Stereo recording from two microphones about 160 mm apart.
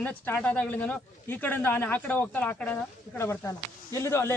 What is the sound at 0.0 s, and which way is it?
Speech, 10° left (ahead or behind).